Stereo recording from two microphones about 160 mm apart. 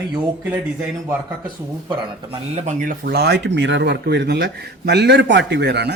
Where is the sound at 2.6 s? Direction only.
50° right (ahead or behind).